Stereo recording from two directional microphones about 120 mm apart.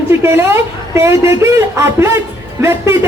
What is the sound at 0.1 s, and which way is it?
A woman's voice, 20° right (ahead or behind).